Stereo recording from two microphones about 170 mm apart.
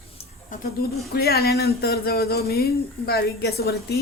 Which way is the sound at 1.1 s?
65° left (ahead or behind).